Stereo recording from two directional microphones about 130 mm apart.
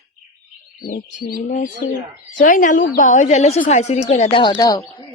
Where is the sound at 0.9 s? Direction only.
90° left.